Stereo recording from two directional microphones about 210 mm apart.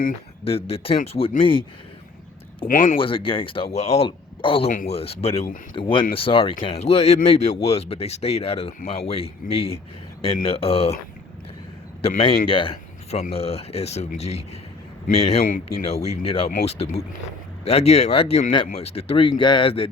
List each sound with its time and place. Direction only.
0.4 s speech: 25° left (ahead or behind)
2.6 s speech: 40° left (ahead or behind)
3.0 s speech: 25° left (ahead or behind)
12.0 s speech: 25° left (ahead or behind)